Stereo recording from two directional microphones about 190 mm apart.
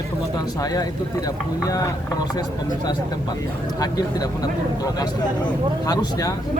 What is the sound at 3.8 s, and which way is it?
Speech, 20° left (ahead or behind).